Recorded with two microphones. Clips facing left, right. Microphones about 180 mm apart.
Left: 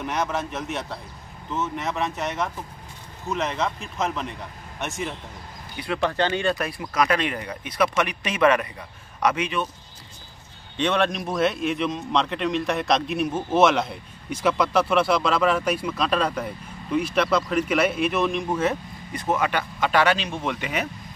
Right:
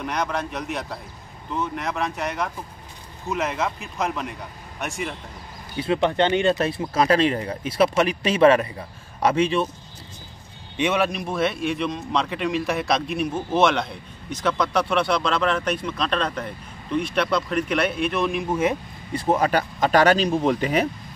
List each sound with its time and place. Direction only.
0.0 s a man's voice: 5° left (ahead or behind)
5.8 s speech: 20° right (ahead or behind)
10.8 s a man's voice: 10° right (ahead or behind)
19.1 s speech: 35° right (ahead or behind)